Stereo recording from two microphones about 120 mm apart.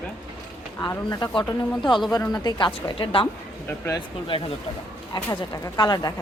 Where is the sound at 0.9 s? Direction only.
30° left (ahead or behind).